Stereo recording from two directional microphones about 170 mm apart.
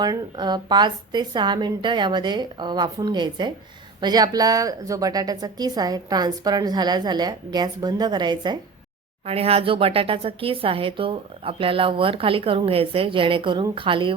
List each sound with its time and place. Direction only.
0.0 s a woman's voice: 25° right (ahead or behind)